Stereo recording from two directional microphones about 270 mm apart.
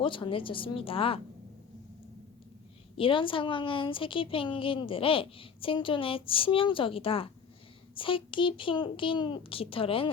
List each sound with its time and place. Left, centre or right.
0.0 s a woman's voice: centre
3.0 s a woman's voice: centre